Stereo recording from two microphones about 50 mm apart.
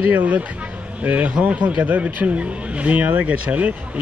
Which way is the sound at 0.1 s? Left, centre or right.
Right.